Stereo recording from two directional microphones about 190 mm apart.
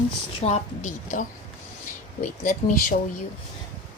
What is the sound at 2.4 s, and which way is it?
Speech, 45° left (ahead or behind).